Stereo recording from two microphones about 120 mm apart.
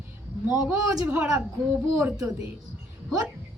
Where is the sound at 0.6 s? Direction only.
25° right (ahead or behind).